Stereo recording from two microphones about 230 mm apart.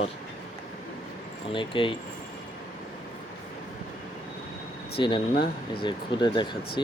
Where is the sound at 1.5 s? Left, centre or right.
Left.